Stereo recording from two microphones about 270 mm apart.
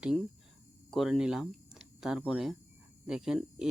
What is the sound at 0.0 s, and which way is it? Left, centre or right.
Speech, centre.